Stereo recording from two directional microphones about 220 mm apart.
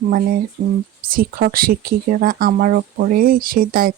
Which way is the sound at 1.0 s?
40° right (ahead or behind).